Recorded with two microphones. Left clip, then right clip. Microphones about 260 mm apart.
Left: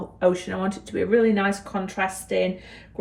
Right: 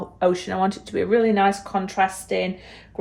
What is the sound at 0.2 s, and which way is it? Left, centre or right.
A woman's voice, right.